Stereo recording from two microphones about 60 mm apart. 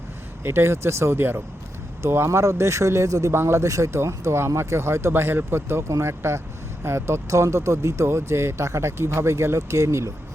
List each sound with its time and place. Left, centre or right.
0.4 s speech: right
3.3 s speech: right